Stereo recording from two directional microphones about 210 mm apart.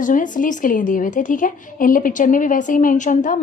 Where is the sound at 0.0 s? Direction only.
40° left (ahead or behind).